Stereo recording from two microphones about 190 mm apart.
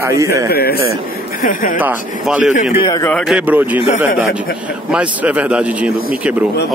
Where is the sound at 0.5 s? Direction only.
55° left (ahead or behind).